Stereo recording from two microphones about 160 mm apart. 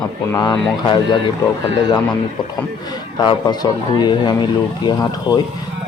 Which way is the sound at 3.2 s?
25° left (ahead or behind).